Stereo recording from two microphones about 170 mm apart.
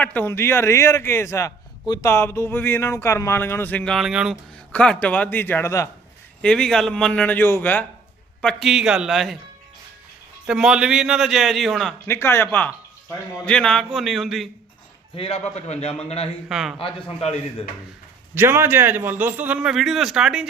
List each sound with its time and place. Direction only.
0.0 s a man's voice: 10° left (ahead or behind)
4.7 s a man's voice: 10° left (ahead or behind)
6.4 s a man's voice: 5° left (ahead or behind)
8.4 s a man's voice: centre (ahead or behind)
10.4 s a man's voice: 5° right (ahead or behind)
12.0 s a man's voice: 15° left (ahead or behind)
15.1 s a man's voice: 35° left (ahead or behind)
16.5 s a man's voice: 5° right (ahead or behind)
16.7 s a man's voice: 35° left (ahead or behind)
18.3 s a man's voice: 15° right (ahead or behind)